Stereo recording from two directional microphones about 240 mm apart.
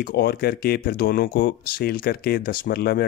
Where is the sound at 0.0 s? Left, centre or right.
Left.